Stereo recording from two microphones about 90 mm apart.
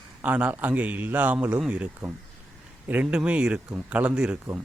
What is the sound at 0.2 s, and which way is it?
Speech, 15° right (ahead or behind).